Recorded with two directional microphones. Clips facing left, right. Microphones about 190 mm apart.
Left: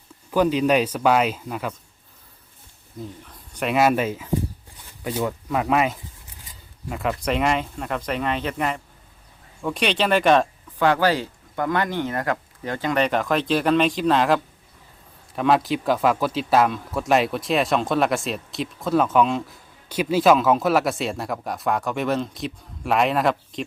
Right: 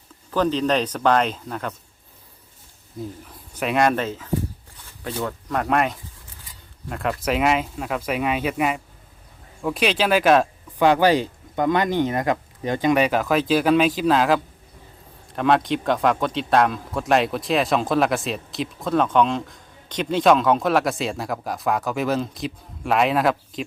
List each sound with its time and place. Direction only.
0.3 s speech: 10° left (ahead or behind)
3.2 s speech: 5° right (ahead or behind)
10.8 s speech: 15° right (ahead or behind)